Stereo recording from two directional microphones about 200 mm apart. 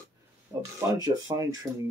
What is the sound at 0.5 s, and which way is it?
Speech, 15° right (ahead or behind).